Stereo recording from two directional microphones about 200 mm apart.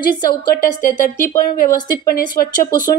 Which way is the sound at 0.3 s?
45° left (ahead or behind).